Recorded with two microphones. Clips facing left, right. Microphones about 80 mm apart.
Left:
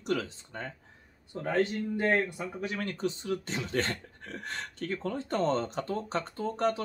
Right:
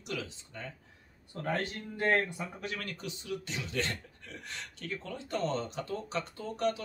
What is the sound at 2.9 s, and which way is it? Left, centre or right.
Speech, left.